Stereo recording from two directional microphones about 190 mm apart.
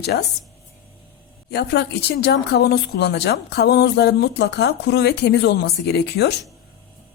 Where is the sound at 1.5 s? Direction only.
60° left (ahead or behind).